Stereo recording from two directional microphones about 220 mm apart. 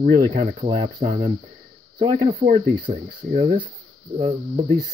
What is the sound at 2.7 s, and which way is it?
Speech, 25° right (ahead or behind).